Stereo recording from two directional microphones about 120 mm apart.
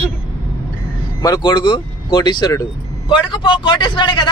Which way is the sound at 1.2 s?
35° left (ahead or behind).